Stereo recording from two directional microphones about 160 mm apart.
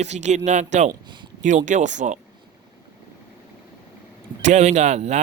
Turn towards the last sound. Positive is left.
turn(degrees=-45)  # may be behind; listen again after turning